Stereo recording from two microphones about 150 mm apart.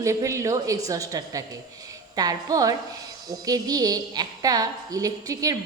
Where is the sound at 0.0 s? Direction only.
20° right (ahead or behind).